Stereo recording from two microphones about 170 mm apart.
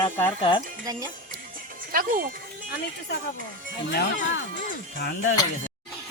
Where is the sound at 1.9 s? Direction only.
55° right (ahead or behind).